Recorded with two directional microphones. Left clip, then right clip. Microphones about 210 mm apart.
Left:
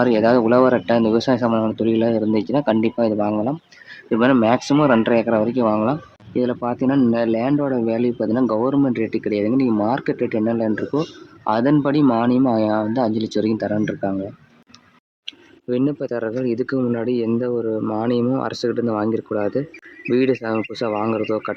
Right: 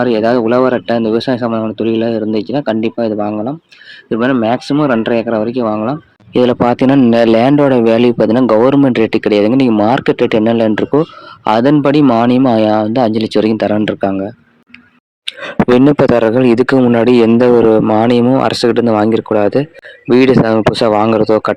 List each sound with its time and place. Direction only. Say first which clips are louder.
0.0 s speech: right 4 dB; 20° right (ahead or behind)
6.3 s a man's voice: right 11 dB; 45° right (ahead or behind)
15.3 s a man's voice: right 14 dB; 50° right (ahead or behind)